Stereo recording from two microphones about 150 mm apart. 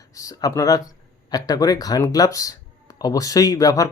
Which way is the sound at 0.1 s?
20° left (ahead or behind).